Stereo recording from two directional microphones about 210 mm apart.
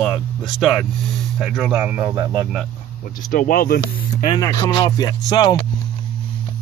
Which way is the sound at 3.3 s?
40° left (ahead or behind).